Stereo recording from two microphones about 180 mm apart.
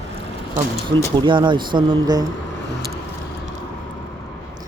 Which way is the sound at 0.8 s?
25° right (ahead or behind).